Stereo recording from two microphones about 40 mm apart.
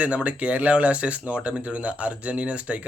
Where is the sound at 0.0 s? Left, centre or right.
Right.